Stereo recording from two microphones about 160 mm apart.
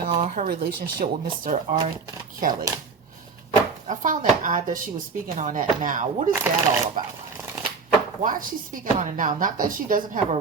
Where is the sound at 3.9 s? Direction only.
55° right (ahead or behind).